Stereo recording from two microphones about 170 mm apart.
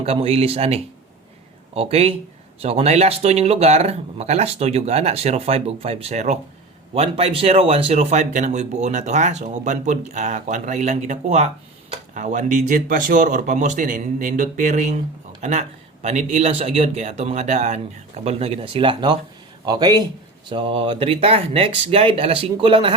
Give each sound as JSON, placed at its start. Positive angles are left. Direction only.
{"t": 0.0, "sound": "speech", "side_deg": -35}